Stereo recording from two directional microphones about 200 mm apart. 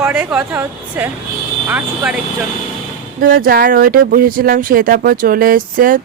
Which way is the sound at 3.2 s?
45° right (ahead or behind).